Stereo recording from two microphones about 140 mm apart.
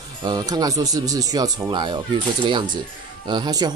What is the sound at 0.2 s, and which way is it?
Speech, 30° right (ahead or behind).